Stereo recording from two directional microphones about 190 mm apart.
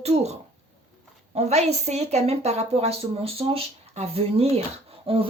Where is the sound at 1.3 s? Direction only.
35° right (ahead or behind).